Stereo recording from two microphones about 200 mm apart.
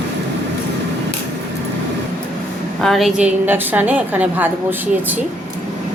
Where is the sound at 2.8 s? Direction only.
Centre (ahead or behind).